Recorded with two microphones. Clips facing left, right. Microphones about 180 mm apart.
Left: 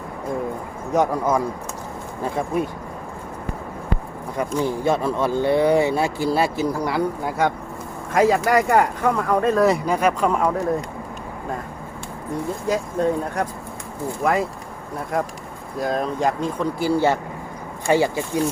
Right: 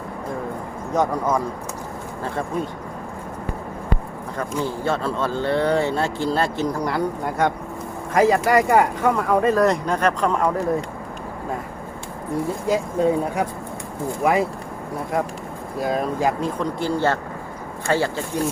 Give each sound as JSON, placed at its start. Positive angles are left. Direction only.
{"t": 0.9, "sound": "speech", "side_deg": 10}
{"t": 4.4, "sound": "speech", "side_deg": 15}
{"t": 12.6, "sound": "speech", "side_deg": -5}
{"t": 15.8, "sound": "speech", "side_deg": -5}